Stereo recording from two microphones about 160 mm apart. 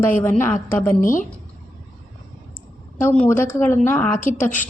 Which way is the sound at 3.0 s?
10° left (ahead or behind).